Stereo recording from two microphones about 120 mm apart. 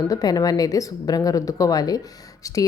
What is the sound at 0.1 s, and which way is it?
A woman's voice, 30° left (ahead or behind).